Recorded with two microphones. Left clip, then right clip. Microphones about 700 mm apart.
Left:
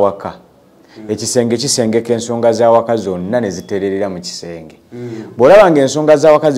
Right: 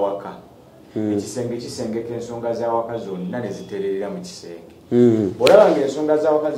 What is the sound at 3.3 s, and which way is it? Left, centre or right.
A man's voice, left.